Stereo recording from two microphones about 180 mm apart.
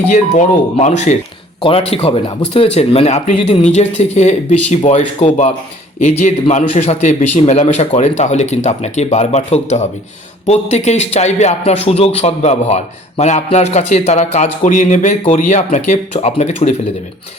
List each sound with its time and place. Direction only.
0.1 s speech: 40° left (ahead or behind)